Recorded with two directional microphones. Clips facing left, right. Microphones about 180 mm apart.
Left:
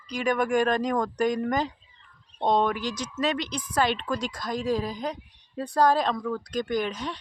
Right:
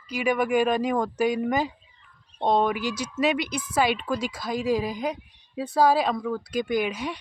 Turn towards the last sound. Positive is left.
turn(degrees=-10)  # may be behind; listen again after turning